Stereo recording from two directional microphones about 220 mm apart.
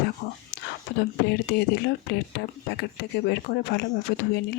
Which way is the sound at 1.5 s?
50° left (ahead or behind).